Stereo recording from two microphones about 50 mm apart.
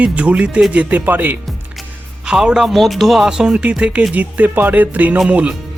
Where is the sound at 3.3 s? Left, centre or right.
Centre.